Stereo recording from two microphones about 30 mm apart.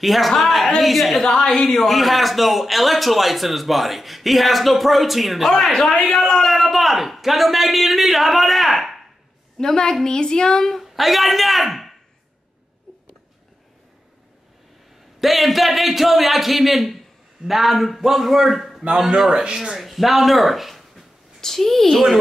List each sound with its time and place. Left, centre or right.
0.0 s a man's voice: centre
0.4 s a sound: centre
0.7 s a man's voice: centre
1.2 s a child's voice: centre
1.8 s a man's voice: centre
5.6 s a child's voice: centre
6.5 s a man's voice: centre
9.6 s a woman's voice: centre
10.8 s a man's voice: centre
15.1 s a man's voice: centre
19.4 s speech: right
19.8 s speech: centre
21.4 s a child's voice: centre